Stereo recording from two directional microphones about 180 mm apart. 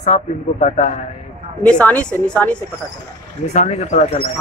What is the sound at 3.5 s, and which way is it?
Speech, 40° left (ahead or behind).